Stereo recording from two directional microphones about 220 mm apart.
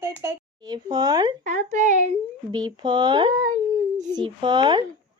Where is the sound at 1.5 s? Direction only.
35° right (ahead or behind).